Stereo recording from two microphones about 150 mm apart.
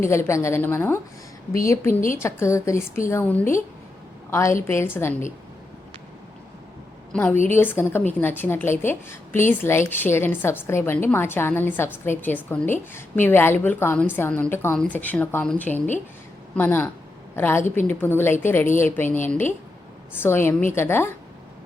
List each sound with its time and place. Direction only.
0.0 s a woman's voice: 20° left (ahead or behind)
1.9 s a woman's voice: 65° left (ahead or behind)
2.1 s a woman's voice: 15° left (ahead or behind)
7.1 s a woman's voice: 10° left (ahead or behind)